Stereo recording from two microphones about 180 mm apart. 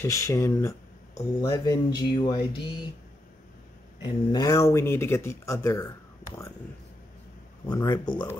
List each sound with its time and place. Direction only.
0.0 s speech: 15° left (ahead or behind)
4.0 s speech: 20° left (ahead or behind)
7.6 s speech: 20° left (ahead or behind)